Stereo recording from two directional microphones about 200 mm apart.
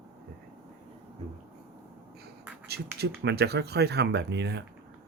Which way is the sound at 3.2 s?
55° right (ahead or behind).